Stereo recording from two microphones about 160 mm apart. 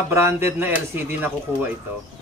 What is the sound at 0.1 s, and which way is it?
Speech, 15° right (ahead or behind).